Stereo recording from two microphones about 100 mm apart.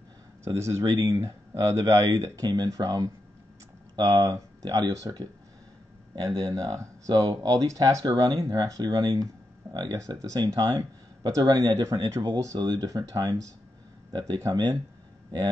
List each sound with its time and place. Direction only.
0.4 s speech: 30° right (ahead or behind)
6.4 s speech: 35° right (ahead or behind)